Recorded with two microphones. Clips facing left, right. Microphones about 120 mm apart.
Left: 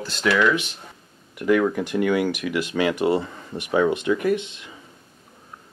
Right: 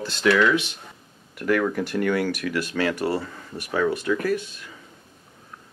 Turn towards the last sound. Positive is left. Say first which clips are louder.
# left 3 dB
turn(degrees=20)  # may be behind; listen again after turning